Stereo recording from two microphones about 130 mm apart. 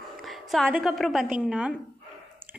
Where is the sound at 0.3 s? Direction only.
Centre (ahead or behind).